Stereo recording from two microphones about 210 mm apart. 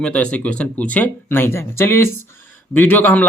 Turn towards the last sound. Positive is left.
turn(degrees=10)  # may be behind; listen again after turning